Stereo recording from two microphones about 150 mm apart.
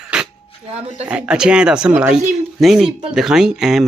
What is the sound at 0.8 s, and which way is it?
Speech, 45° right (ahead or behind).